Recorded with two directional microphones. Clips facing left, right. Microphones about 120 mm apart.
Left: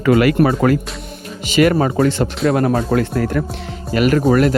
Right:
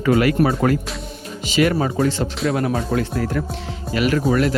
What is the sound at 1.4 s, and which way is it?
Speech, 60° left (ahead or behind).